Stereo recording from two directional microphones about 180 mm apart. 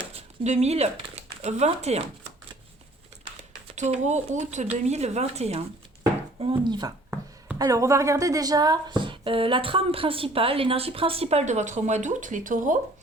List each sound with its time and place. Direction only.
0.0 s speech: 35° right (ahead or behind)
3.2 s speech: 35° right (ahead or behind)